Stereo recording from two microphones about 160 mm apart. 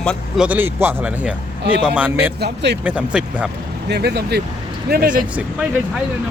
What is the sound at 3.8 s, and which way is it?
Speech, 90° right.